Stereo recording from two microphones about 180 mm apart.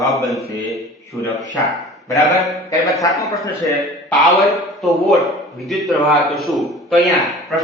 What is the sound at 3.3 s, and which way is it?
Speech, 15° left (ahead or behind).